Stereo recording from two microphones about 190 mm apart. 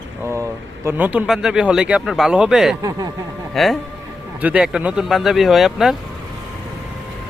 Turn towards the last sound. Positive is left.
turn(degrees=0)  # may be behind; listen again after turning